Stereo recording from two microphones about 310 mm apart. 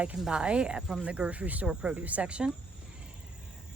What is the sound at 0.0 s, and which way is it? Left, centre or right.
A woman's voice, centre.